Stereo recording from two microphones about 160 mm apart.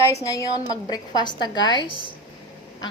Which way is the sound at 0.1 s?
20° left (ahead or behind).